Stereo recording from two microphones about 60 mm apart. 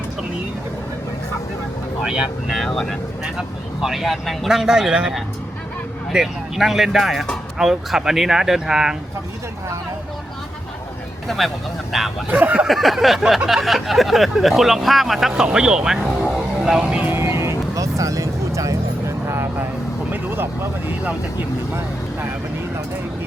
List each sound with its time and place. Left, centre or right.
2.0 s speech: centre
2.6 s speech: centre
3.3 s speech: centre
6.1 s speech: centre
11.3 s speech: centre
12.3 s speech: right
12.6 s speech: centre
17.2 s vehicle: right
20.1 s vehicle: right